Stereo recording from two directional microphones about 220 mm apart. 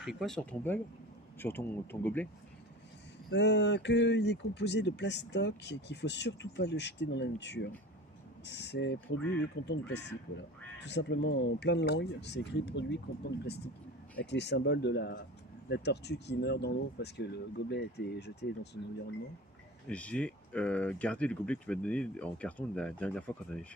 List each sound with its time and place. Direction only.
0.0 s speech: centre (ahead or behind)
3.3 s speech: 50° left (ahead or behind)
19.9 s speech: 5° left (ahead or behind)